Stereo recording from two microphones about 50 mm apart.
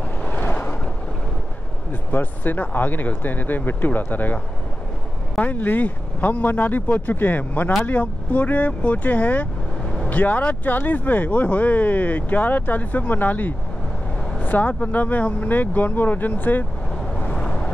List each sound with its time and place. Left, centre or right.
0.4 s a sound: left
1.9 s speech: left
14.4 s vehicle: left
14.7 s speech: left
17.3 s vehicle: left